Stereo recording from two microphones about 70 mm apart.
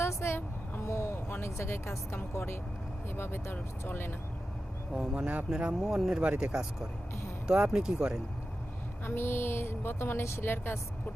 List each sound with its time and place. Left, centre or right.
0.0 s vehicle: left
1.3 s a woman's voice: left
3.2 s a woman's voice: left
4.9 s speech: centre
9.0 s a woman's voice: left